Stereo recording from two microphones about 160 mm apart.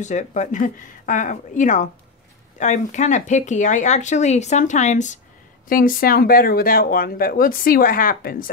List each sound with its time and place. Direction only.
0.0 s speech: 50° left (ahead or behind)
5.7 s speech: 65° left (ahead or behind)